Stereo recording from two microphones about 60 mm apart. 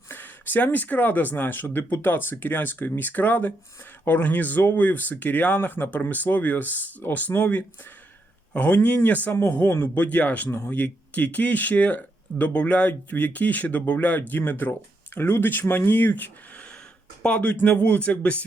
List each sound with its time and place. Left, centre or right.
0.1 s speech: left
9.3 s speech: left